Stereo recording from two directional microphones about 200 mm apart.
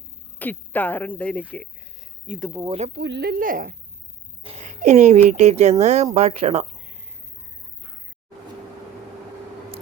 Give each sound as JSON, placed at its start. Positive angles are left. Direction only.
{"t": 0.3, "sound": "speech", "side_deg": 10}
{"t": 2.2, "sound": "speech", "side_deg": -5}
{"t": 2.9, "sound": "a woman's voice", "side_deg": -55}
{"t": 4.4, "sound": "speech", "side_deg": -35}